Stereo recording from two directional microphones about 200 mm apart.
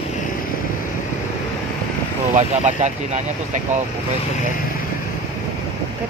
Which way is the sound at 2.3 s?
35° right (ahead or behind).